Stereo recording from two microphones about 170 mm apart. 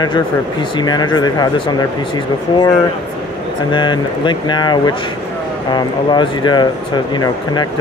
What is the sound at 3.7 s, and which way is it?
Speech, 25° left (ahead or behind).